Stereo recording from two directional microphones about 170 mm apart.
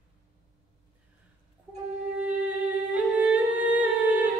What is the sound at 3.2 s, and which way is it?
Humming, 10° right (ahead or behind).